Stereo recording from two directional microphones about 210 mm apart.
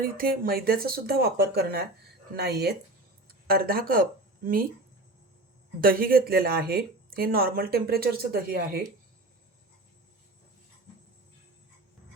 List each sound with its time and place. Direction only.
0.0 s speech: 45° right (ahead or behind)
5.8 s speech: 45° right (ahead or behind)